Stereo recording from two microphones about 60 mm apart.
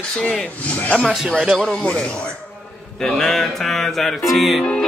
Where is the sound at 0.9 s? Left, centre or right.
Centre.